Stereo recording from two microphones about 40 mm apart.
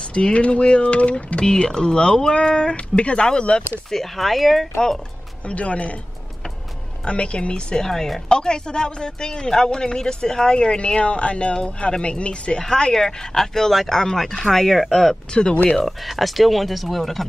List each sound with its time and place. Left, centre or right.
0.0 s speech: left
1.4 s speech: centre
3.9 s speech: centre
5.4 s speech: left
7.1 s speech: left
7.8 s speech: centre
15.5 s speech: left
15.8 s speech: centre